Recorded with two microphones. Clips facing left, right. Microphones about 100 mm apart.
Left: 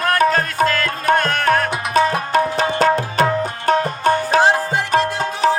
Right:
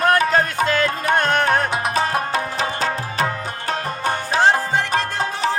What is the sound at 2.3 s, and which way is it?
Music, 55° left (ahead or behind).